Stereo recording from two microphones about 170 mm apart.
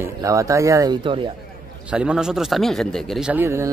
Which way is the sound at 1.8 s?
5° right (ahead or behind).